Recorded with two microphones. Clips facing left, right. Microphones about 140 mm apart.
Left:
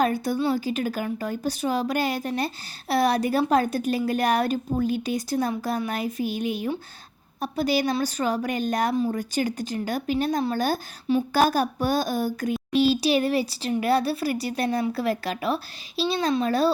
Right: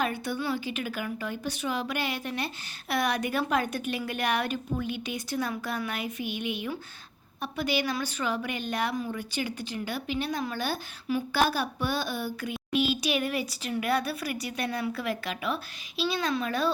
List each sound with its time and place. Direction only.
0.0 s a child's voice: 40° left (ahead or behind)